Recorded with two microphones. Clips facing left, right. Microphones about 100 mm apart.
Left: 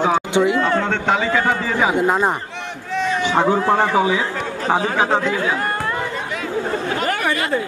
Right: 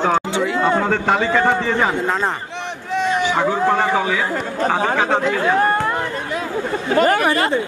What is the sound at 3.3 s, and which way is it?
Speech, 15° left (ahead or behind).